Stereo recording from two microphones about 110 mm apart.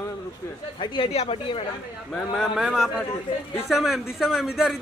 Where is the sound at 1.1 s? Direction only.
70° left (ahead or behind).